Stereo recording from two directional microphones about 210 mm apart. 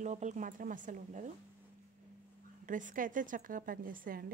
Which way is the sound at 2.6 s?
40° right (ahead or behind).